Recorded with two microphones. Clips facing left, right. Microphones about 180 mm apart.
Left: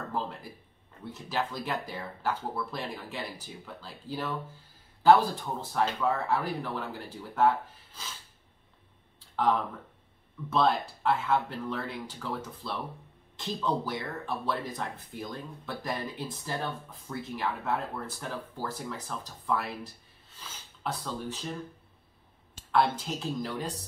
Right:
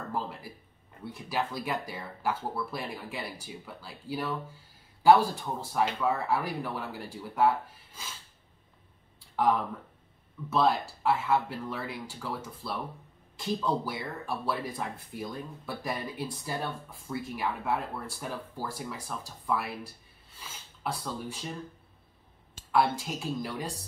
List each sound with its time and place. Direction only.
0.1 s a sound: 10° right (ahead or behind)
1.1 s speech: 10° right (ahead or behind)
9.3 s speech: 10° right (ahead or behind)
22.7 s speech: 5° right (ahead or behind)